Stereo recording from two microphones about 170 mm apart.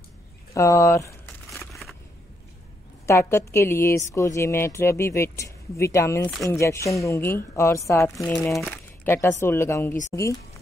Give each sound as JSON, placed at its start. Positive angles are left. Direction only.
{"t": 0.6, "sound": "speech", "side_deg": 20}
{"t": 1.7, "sound": "a sound", "side_deg": 0}
{"t": 3.1, "sound": "a woman's voice", "side_deg": 15}